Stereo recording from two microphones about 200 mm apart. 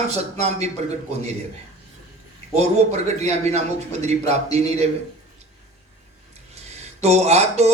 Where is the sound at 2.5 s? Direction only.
35° right (ahead or behind).